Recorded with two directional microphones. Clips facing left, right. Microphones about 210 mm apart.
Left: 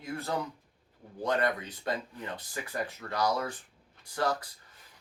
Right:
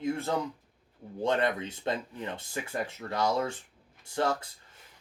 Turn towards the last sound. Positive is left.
turn(degrees=-25)  # may be behind; listen again after turning